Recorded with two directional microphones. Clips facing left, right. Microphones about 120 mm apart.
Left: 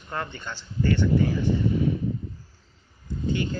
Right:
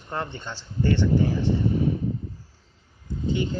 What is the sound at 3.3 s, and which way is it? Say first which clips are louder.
Speech: right 1 dB; 20° right (ahead or behind).